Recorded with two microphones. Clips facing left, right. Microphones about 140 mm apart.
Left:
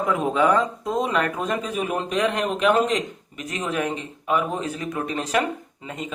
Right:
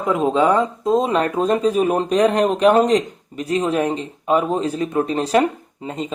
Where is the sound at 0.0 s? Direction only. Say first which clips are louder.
Right 4 dB; 20° right (ahead or behind).